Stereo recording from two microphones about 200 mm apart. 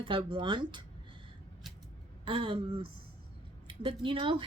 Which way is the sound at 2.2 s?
25° right (ahead or behind).